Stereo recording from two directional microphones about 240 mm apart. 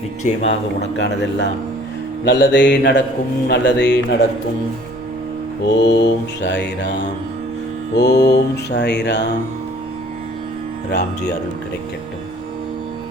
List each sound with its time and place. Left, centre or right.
0.2 s speech: left
0.9 s mantra: left
5.6 s mantra: left